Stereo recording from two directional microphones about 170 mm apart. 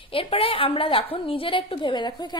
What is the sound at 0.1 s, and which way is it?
A woman's voice, 35° left (ahead or behind).